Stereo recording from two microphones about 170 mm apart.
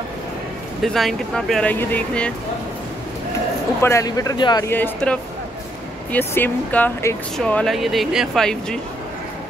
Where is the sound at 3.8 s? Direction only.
20° left (ahead or behind).